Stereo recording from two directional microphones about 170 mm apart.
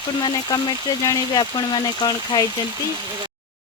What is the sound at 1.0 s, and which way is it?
Speech, 20° left (ahead or behind).